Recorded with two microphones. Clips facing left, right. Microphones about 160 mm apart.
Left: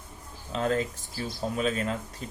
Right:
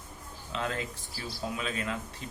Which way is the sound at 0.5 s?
40° left (ahead or behind).